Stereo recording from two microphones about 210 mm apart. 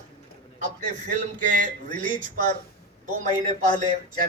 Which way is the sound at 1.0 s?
40° right (ahead or behind).